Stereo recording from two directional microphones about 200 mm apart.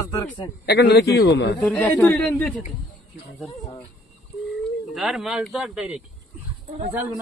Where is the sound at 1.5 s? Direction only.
5° left (ahead or behind).